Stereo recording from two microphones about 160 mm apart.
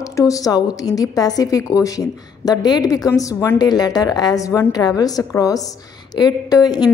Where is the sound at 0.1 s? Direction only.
20° left (ahead or behind).